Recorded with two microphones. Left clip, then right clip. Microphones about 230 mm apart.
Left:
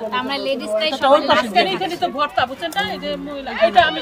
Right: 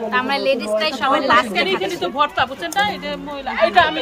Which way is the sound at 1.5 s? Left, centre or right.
Centre.